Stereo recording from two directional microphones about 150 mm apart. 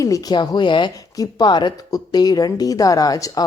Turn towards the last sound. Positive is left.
turn(degrees=25)  # may be behind; listen again after turning